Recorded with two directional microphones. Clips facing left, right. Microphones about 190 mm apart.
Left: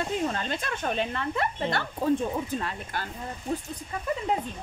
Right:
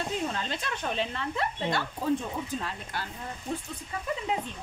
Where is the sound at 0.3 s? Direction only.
50° left (ahead or behind).